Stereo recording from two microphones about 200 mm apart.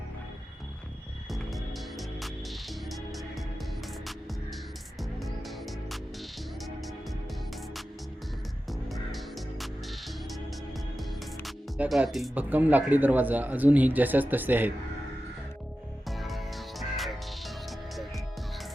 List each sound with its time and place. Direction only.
1.3 s music: centre (ahead or behind)
4.9 s music: centre (ahead or behind)
8.9 s music: centre (ahead or behind)
11.4 s speech: centre (ahead or behind)
16.0 s music: centre (ahead or behind)